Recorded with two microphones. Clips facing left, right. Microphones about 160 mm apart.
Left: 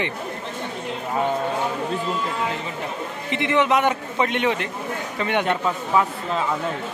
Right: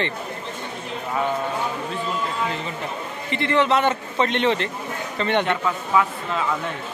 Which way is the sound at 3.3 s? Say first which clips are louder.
Even; 15° left (ahead or behind).